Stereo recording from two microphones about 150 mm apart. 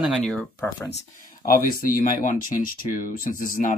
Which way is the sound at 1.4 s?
75° left (ahead or behind).